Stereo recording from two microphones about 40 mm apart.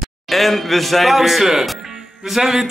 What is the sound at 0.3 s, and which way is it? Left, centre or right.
A man's voice, centre.